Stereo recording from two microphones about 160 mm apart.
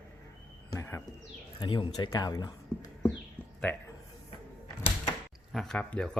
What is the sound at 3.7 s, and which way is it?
Speech, 10° left (ahead or behind).